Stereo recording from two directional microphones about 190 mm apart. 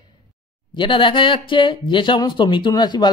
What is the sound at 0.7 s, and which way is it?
Speech, 25° left (ahead or behind).